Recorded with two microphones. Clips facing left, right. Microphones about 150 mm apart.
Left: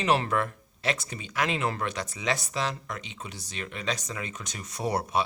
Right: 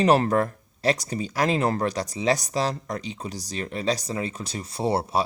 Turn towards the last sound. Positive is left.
turn(degrees=-30)  # may be behind; listen again after turning